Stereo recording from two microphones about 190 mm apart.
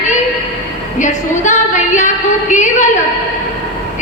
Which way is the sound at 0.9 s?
40° left (ahead or behind).